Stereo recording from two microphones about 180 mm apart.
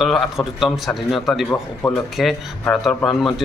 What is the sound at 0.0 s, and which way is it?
Speech, centre (ahead or behind).